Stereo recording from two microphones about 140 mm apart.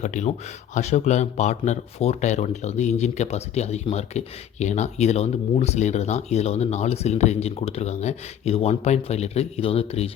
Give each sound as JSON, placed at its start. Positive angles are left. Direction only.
{"t": 0.0, "sound": "a man's voice", "side_deg": 60}